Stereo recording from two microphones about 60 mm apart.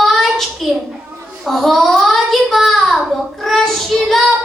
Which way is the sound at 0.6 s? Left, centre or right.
Centre.